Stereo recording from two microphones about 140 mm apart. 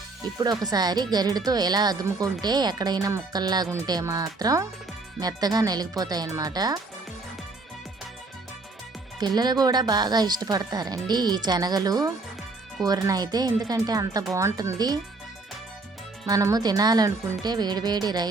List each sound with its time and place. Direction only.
0.3 s speech: 30° right (ahead or behind)
9.1 s speech: 30° right (ahead or behind)
16.2 s speech: 25° right (ahead or behind)